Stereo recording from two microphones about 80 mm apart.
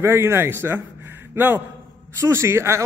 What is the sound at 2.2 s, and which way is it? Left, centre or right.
Speech, right.